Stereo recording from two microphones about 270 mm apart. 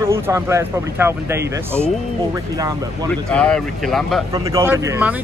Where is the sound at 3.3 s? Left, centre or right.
Centre.